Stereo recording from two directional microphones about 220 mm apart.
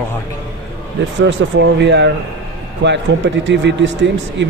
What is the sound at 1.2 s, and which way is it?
A man's voice, 55° right (ahead or behind).